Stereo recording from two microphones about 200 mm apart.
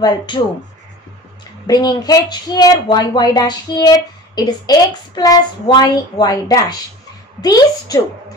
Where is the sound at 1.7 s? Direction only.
20° left (ahead or behind).